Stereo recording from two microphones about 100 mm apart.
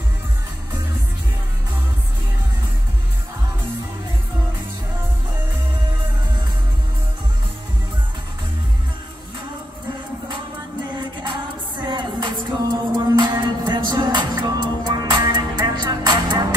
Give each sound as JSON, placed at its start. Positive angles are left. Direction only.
{"t": 11.8, "sound": "music", "side_deg": -45}